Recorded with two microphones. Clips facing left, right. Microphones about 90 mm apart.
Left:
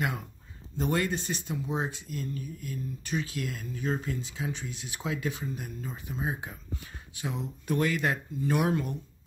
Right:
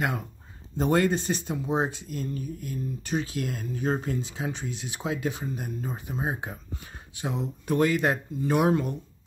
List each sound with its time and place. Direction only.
0.7 s speech: 40° right (ahead or behind)